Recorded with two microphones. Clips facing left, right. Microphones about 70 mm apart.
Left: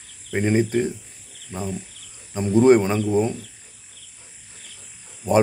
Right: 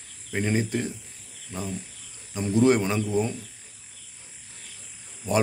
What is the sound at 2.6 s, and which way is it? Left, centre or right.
Speech, left.